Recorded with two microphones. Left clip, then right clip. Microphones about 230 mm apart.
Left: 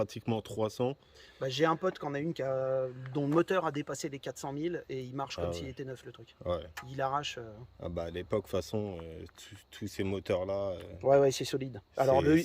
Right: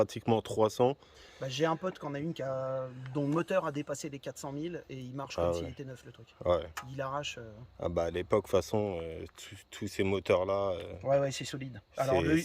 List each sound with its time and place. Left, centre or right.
0.0 s speech: centre
1.4 s speech: centre
6.4 s speech: centre
6.9 s speech: centre
7.8 s speech: centre
11.0 s speech: left